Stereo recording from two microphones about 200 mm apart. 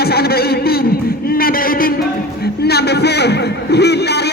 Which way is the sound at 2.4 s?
55° left (ahead or behind).